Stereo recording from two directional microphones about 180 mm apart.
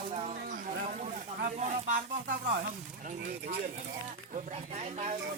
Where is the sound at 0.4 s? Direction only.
45° right (ahead or behind).